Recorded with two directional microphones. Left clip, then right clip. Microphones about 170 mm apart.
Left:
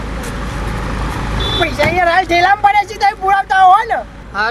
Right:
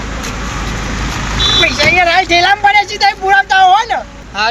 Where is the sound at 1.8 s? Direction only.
25° left (ahead or behind).